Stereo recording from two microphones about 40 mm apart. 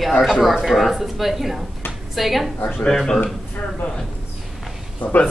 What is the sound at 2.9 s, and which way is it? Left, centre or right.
Speech, centre.